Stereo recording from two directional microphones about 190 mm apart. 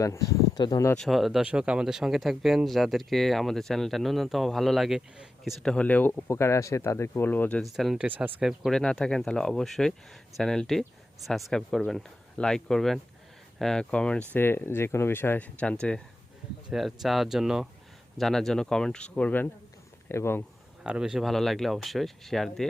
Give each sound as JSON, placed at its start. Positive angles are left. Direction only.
{"t": 0.0, "sound": "speech", "side_deg": 15}
{"t": 0.9, "sound": "speech", "side_deg": 0}
{"t": 20.8, "sound": "speech", "side_deg": -5}